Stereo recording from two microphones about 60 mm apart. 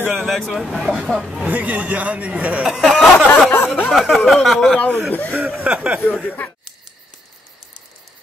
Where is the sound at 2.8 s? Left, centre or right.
Centre.